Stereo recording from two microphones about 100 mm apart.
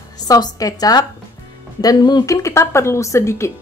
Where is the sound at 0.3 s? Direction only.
35° left (ahead or behind).